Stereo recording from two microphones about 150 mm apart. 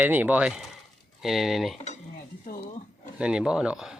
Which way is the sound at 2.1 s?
75° left (ahead or behind).